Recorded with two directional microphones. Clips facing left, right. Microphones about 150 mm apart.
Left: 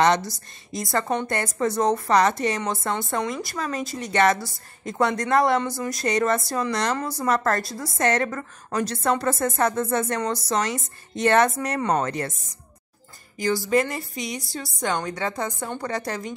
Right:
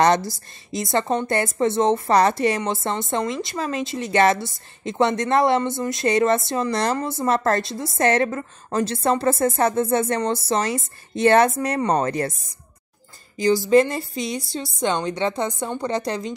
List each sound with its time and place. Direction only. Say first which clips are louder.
0.0 s speech: right 2 dB; 40° right (ahead or behind)
0.7 s a woman's voice: right 3 dB; 25° right (ahead or behind)
13.7 s a woman's voice: right 6 dB; 30° right (ahead or behind)